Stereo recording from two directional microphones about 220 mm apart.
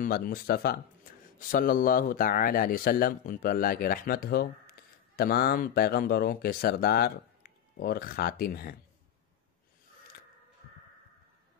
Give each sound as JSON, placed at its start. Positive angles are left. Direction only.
{"t": 0.0, "sound": "speech", "side_deg": 40}